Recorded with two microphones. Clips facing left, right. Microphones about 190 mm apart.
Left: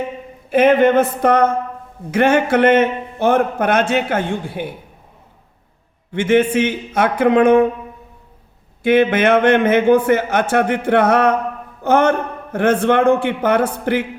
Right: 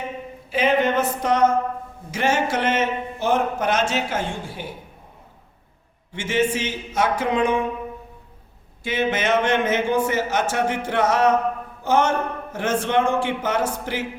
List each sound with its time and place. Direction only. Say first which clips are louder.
0.5 s a man's voice: left 8 dB; 55° left (ahead or behind)
6.1 s a man's voice: left 8 dB; 60° left (ahead or behind)
8.8 s a man's voice: left 10 dB; 60° left (ahead or behind)